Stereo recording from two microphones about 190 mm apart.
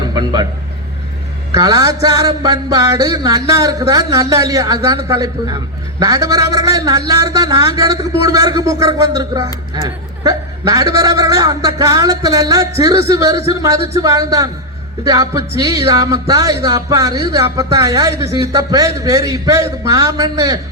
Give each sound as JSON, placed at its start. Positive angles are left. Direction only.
{"t": 0.1, "sound": "a sound", "side_deg": -20}
{"t": 1.5, "sound": "speech", "side_deg": -20}
{"t": 7.1, "sound": "music", "side_deg": -20}
{"t": 9.1, "sound": "speech", "side_deg": -20}
{"t": 10.9, "sound": "music", "side_deg": -20}
{"t": 15.0, "sound": "speech", "side_deg": -20}